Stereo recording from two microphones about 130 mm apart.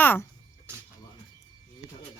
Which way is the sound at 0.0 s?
15° left (ahead or behind).